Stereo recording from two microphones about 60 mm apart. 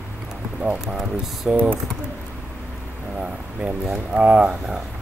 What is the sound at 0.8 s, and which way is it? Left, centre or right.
Speech, centre.